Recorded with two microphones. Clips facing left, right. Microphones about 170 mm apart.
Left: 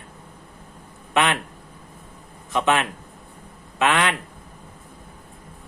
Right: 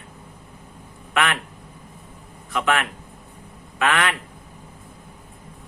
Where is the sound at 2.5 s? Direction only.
20° left (ahead or behind).